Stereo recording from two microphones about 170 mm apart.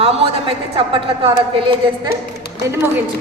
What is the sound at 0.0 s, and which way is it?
A woman's voice, 35° right (ahead or behind).